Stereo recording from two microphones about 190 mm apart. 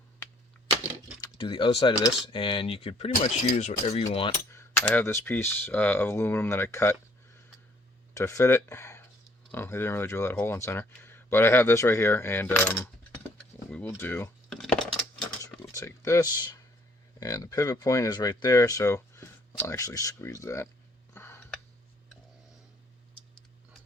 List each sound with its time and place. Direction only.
1.2 s speech: 25° left (ahead or behind)
4.3 s speech: 15° left (ahead or behind)
8.1 s speech: 15° left (ahead or behind)
13.7 s a sound: 10° left (ahead or behind)
15.7 s speech: 15° left (ahead or behind)
21.1 s a sound: 10° left (ahead or behind)